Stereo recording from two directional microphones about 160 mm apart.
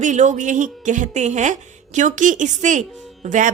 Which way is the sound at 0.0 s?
50° right (ahead or behind).